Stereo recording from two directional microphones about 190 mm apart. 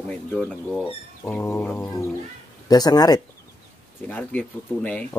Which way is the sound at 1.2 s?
15° left (ahead or behind).